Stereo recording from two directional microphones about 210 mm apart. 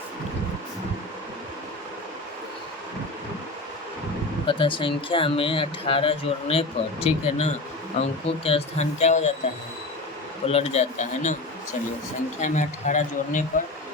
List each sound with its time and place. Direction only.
4.4 s speech: 25° left (ahead or behind)
10.4 s speech: 30° left (ahead or behind)
12.4 s speech: 35° left (ahead or behind)